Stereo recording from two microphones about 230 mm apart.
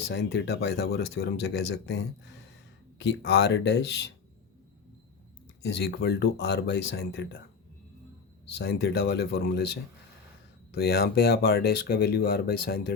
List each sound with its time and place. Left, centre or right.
0.1 s speech: left
5.6 s speech: left
8.5 s speech: left
10.8 s speech: left